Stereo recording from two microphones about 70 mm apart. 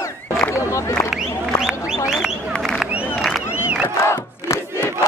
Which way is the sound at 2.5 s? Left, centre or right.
Centre.